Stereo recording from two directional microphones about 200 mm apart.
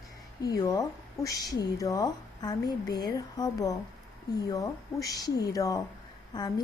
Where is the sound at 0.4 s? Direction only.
15° left (ahead or behind).